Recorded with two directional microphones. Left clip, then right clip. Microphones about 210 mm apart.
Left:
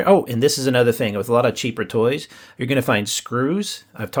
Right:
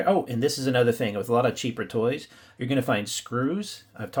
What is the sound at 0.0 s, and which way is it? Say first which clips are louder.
Speech: left 8 dB; 45° left (ahead or behind).